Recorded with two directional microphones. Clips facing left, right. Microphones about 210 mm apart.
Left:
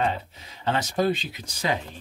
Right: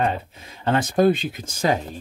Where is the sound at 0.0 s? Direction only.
50° right (ahead or behind).